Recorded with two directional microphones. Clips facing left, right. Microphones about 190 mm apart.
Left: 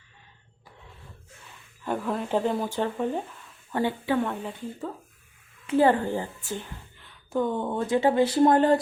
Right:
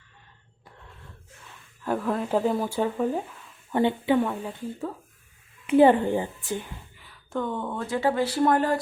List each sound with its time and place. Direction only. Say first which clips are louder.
1.8 s speech: right 2 dB; centre (ahead or behind)
3.7 s speech: right 4 dB; 20° right (ahead or behind)
4.2 s speech: right 2 dB; 5° right (ahead or behind)
5.6 s a woman's voice: right 4 dB; 20° right (ahead or behind)
7.3 s speech: left 3 dB; 15° left (ahead or behind)